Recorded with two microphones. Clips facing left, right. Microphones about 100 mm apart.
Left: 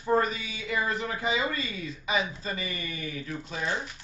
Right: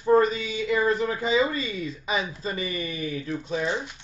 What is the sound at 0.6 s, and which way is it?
Speech, 30° right (ahead or behind).